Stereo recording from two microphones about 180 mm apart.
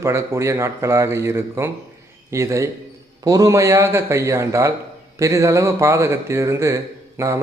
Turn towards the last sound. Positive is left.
turn(degrees=-15)  # may be behind; listen again after turning